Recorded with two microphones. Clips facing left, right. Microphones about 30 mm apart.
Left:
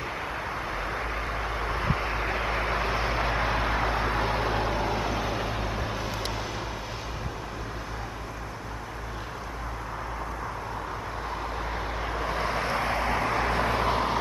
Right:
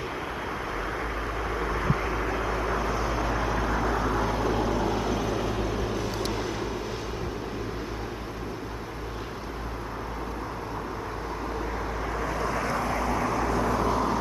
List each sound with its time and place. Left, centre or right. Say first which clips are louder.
1.5 s vehicle: right 2 dB; left
12.1 s vehicle: even; left